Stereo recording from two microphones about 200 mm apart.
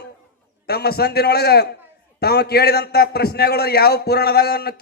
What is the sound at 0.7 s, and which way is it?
A man's voice, 50° left (ahead or behind).